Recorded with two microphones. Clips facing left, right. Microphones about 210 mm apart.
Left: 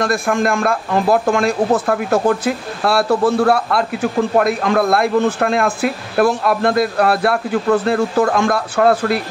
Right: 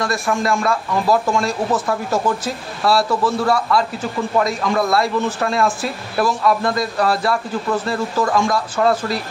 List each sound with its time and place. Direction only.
0.0 s speech: 55° left (ahead or behind)